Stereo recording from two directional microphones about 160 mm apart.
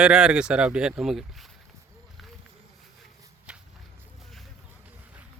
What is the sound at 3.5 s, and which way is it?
Whip, 5° right (ahead or behind).